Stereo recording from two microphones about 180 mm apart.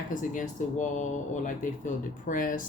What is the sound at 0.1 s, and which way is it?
Speech, 45° left (ahead or behind).